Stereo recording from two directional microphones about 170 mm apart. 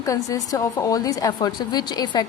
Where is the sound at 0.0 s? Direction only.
20° left (ahead or behind).